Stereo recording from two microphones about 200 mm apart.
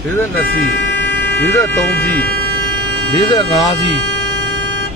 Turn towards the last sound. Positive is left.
turn(degrees=20)  # may be behind; listen again after turning